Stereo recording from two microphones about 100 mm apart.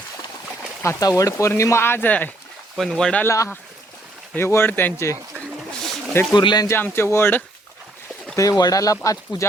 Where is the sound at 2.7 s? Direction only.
5° left (ahead or behind).